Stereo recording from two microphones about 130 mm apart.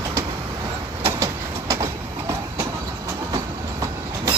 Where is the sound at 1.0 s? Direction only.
25° right (ahead or behind).